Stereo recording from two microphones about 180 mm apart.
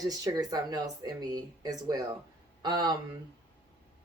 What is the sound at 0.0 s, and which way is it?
Speech, 20° right (ahead or behind).